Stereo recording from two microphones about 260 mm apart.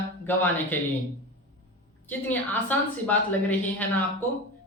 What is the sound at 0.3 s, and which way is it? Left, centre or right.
Speech, centre.